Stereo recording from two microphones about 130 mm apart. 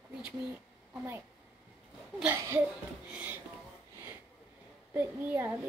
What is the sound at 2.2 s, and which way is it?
A woman's voice, 15° right (ahead or behind).